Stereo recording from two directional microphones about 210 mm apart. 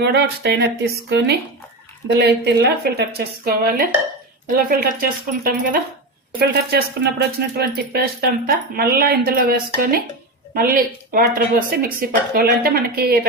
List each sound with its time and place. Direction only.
0.0 s speech: 50° right (ahead or behind)
2.0 s speech: 55° right (ahead or behind)